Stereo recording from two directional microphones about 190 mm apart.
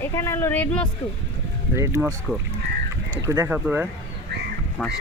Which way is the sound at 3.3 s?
10° right (ahead or behind).